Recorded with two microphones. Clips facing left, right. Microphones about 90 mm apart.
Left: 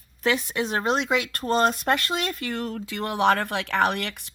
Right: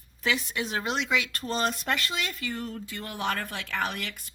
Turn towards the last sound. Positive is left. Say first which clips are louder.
# left 8 dB
turn(degrees=70)  # may be behind; listen again after turning